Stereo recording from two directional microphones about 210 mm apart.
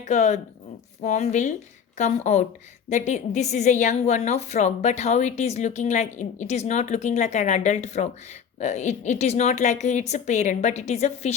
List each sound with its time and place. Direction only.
0.1 s a woman's voice: 35° left (ahead or behind)